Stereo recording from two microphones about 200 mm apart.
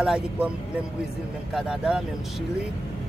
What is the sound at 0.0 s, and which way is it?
Speech, 5° right (ahead or behind).